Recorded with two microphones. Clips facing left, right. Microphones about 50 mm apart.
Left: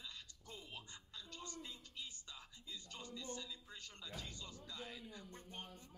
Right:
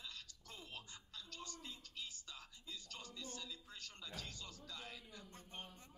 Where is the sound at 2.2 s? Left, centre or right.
Left.